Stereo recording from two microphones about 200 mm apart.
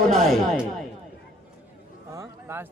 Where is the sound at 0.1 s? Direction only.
Centre (ahead or behind).